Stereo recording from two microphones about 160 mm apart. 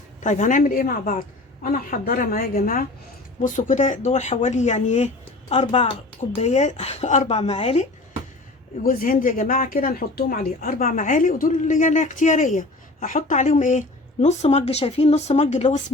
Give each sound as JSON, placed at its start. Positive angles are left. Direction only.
{"t": 0.2, "sound": "a woman's voice", "side_deg": 50}
{"t": 8.8, "sound": "speech", "side_deg": 60}